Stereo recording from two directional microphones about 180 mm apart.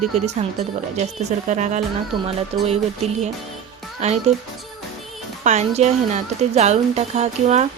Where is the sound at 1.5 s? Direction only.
40° right (ahead or behind).